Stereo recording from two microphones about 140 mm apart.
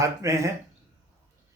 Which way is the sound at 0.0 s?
20° right (ahead or behind).